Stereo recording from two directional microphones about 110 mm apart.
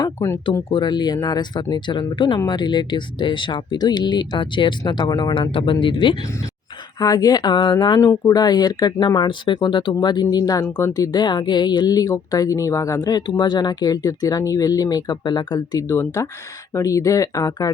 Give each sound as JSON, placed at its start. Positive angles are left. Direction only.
{"t": 0.7, "sound": "speech", "side_deg": 40}
{"t": 5.3, "sound": "speech", "side_deg": 55}
{"t": 7.0, "sound": "speech", "side_deg": 35}